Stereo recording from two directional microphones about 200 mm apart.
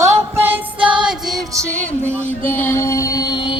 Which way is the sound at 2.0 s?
10° right (ahead or behind).